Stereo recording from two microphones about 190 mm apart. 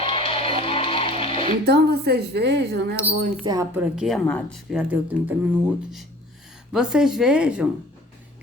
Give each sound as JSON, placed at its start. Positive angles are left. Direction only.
{"t": 0.0, "sound": "music", "side_deg": 30}
{"t": 1.6, "sound": "a woman's voice", "side_deg": -60}
{"t": 3.4, "sound": "speech", "side_deg": -20}
{"t": 3.8, "sound": "speech", "side_deg": -5}